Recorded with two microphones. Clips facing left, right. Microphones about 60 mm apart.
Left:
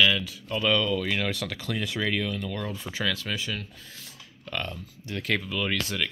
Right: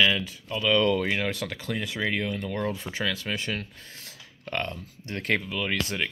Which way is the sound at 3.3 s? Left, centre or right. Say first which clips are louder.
Right 1 dB; right.